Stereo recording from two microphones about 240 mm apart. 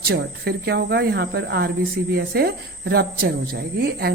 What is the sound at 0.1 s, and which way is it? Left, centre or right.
A woman's voice, right.